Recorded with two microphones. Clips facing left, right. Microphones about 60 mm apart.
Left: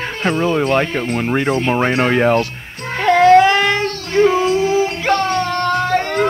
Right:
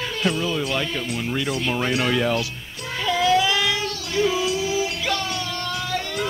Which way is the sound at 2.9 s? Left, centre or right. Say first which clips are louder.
Left 11 dB; left.